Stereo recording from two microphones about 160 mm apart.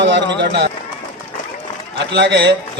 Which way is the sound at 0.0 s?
90° right.